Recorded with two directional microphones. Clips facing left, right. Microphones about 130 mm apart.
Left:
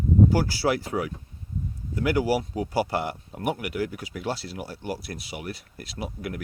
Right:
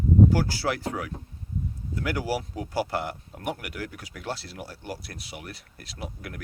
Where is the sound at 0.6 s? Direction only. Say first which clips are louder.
Left 7 dB; 15° left (ahead or behind).